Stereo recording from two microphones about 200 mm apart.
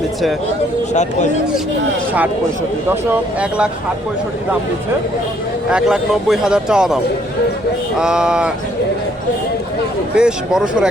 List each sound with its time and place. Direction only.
5.7 s speech: centre (ahead or behind)
10.2 s speech: 5° right (ahead or behind)